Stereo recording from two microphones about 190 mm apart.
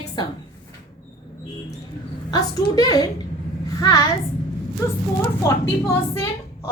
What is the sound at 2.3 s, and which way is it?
A woman's voice, 20° left (ahead or behind).